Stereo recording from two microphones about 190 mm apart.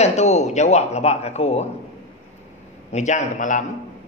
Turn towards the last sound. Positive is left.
turn(degrees=40)  # may be behind; listen again after turning